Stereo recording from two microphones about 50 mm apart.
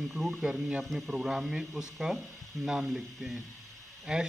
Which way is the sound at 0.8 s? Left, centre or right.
Centre.